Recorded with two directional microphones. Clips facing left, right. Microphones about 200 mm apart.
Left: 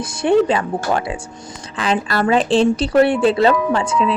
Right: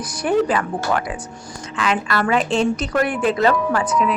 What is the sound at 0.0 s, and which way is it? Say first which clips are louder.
A woman's voice: left 4 dB; 25° left (ahead or behind).